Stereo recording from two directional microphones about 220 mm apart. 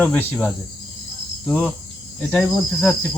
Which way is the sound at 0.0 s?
10° left (ahead or behind).